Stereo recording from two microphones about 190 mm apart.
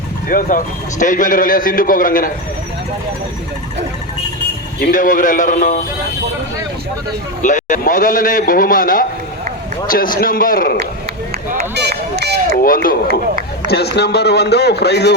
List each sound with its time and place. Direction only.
0.3 s a man's voice: 45° left (ahead or behind)
4.8 s a man's voice: 45° left (ahead or behind)
7.4 s a man's voice: 40° left (ahead or behind)
11.5 s run: 60° right (ahead or behind)
12.6 s a man's voice: 50° left (ahead or behind)